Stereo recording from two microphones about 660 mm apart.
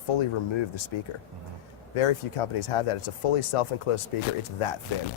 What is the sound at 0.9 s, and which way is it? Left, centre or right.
Speech, left.